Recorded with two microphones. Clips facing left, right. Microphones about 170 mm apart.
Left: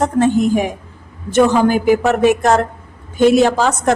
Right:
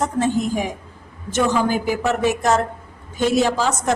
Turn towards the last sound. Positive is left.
turn(degrees=60)  # may be behind; listen again after turning